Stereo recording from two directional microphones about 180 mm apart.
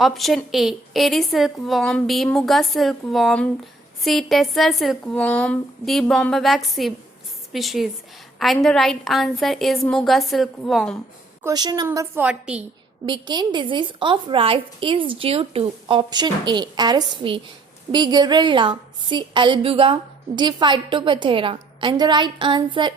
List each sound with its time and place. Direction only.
0.0 s a woman's voice: centre (ahead or behind)
11.4 s a woman's voice: 20° right (ahead or behind); by 12.6 s 5° right (ahead or behind)
13.1 s a woman's voice: 25° right (ahead or behind)